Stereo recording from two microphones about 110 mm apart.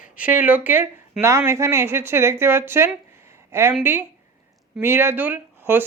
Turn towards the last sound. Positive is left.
turn(degrees=-20)  # may be behind; listen again after turning